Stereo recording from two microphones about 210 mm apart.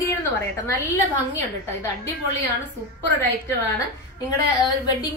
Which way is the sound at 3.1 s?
10° left (ahead or behind).